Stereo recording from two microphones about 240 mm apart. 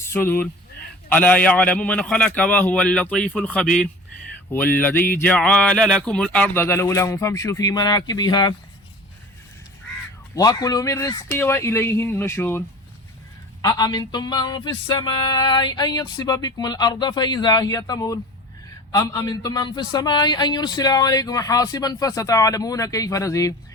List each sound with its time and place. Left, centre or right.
0.0 s a man's voice: centre
10.3 s a man's voice: centre